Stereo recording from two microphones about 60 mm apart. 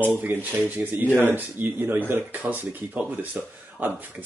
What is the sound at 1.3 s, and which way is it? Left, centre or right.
A man's voice, right.